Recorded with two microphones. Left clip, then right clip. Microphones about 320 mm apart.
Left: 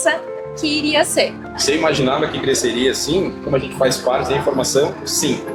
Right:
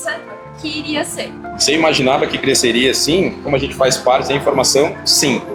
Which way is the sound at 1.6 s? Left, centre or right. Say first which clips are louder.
Right 3 dB; right.